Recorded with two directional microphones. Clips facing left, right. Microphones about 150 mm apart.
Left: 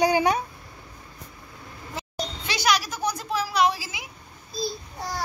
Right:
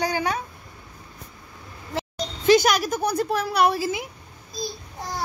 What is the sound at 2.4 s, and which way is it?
Speech, 50° right (ahead or behind).